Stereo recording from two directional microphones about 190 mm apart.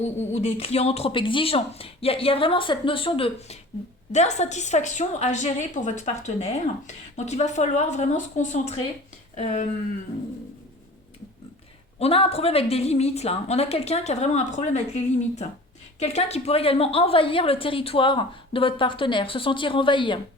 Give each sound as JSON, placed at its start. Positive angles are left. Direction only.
{"t": 0.0, "sound": "a woman's voice", "side_deg": 35}
{"t": 11.9, "sound": "a woman's voice", "side_deg": 30}